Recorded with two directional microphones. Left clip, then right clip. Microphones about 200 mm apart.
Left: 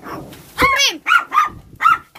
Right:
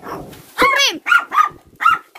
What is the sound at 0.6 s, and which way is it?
Dog, 50° right (ahead or behind).